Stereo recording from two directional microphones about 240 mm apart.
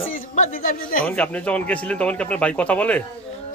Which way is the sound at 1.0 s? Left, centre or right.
Centre.